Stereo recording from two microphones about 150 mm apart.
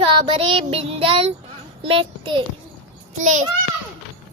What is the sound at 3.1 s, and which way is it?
Speech, 55° right (ahead or behind).